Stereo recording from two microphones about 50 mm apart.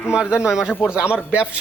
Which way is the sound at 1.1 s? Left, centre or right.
Right.